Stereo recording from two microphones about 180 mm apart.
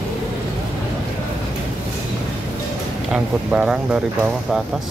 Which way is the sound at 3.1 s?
5° right (ahead or behind).